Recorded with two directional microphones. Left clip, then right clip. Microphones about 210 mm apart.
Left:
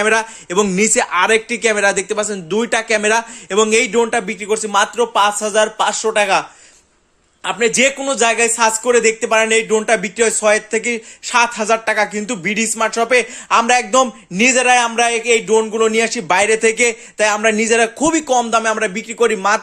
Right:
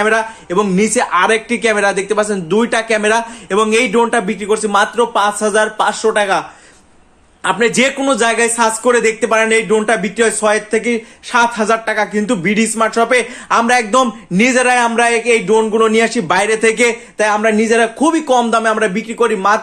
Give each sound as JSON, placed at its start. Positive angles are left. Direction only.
{"t": 0.0, "sound": "speech", "side_deg": 30}
{"t": 7.4, "sound": "speech", "side_deg": 15}